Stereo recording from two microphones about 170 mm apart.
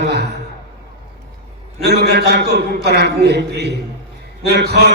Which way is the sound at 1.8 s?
75° right (ahead or behind).